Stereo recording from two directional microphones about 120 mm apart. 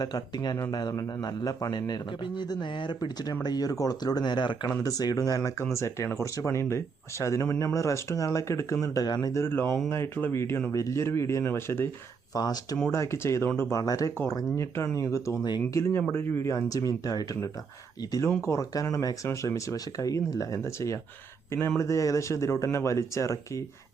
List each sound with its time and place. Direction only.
0.0 s a man's voice: 35° left (ahead or behind)
9.0 s speech: 35° left (ahead or behind)
12.3 s a man's voice: 35° left (ahead or behind)
12.9 s speech: 25° left (ahead or behind)